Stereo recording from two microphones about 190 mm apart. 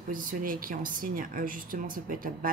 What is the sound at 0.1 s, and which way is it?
Speech, 45° right (ahead or behind).